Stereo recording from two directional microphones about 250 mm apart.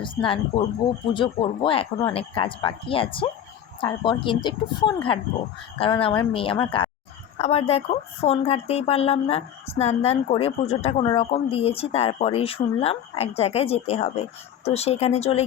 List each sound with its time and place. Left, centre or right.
0.0 s speech: left